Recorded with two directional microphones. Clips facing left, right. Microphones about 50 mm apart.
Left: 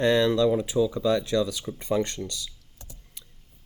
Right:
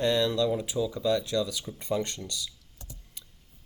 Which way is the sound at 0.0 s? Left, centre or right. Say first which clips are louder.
Left 4 dB; left.